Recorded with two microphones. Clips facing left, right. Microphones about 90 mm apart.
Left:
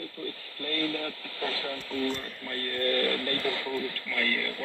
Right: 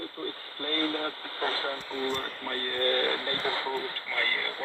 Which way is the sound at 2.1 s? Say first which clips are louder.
Right 3 dB; 45° right (ahead or behind).